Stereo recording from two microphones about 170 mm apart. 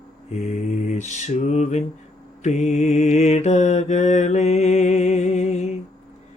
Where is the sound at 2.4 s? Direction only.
40° left (ahead or behind).